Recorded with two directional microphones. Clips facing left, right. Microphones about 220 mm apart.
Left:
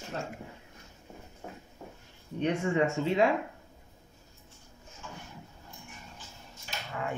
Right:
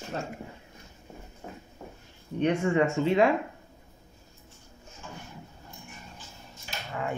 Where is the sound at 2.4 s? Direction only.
65° right (ahead or behind).